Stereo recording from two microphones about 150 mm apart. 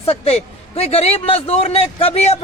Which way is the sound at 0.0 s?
40° left (ahead or behind).